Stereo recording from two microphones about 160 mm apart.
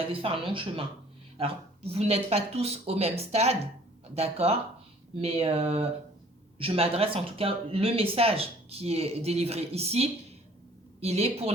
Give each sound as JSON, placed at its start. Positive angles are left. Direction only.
{"t": 0.1, "sound": "speech", "side_deg": -35}